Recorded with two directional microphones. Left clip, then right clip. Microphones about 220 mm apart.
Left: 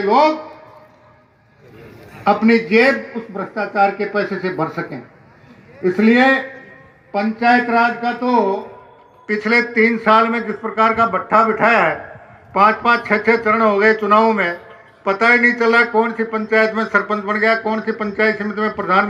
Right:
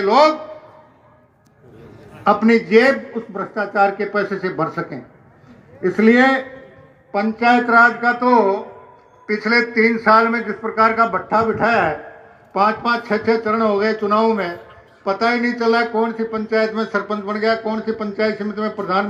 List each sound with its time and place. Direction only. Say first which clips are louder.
0.0 s a man's voice: even; 5° left (ahead or behind)
2.2 s a man's voice: even; 10° left (ahead or behind)
9.2 s a man's voice: left 1 dB; 25° left (ahead or behind)